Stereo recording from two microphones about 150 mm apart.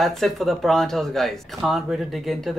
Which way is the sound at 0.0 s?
Centre (ahead or behind).